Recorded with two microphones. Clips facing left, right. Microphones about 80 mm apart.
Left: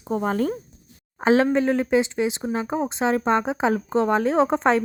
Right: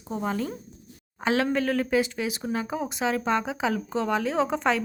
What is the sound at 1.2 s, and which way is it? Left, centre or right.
A woman's voice, left.